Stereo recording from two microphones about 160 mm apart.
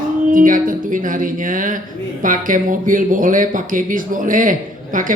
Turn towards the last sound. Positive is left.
turn(degrees=-55)  # may be behind; listen again after turning